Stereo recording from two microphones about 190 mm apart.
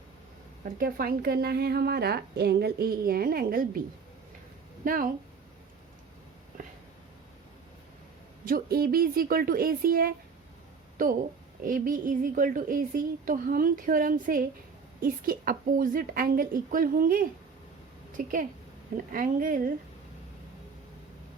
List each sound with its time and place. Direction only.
0.6 s a woman's voice: 50° right (ahead or behind)
8.4 s a woman's voice: 50° right (ahead or behind)